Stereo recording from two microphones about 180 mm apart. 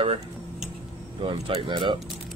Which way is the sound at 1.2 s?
30° right (ahead or behind).